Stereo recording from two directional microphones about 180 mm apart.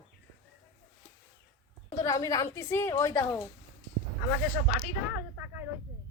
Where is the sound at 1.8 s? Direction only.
15° left (ahead or behind).